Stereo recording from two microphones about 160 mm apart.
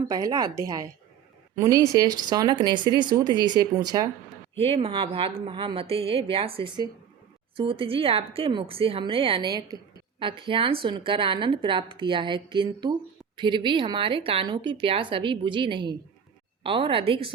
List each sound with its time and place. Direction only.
0.1 s speech: 25° right (ahead or behind)
4.5 s speech: 35° right (ahead or behind)